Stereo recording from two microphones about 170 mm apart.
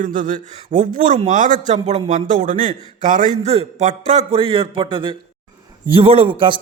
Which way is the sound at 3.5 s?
40° right (ahead or behind).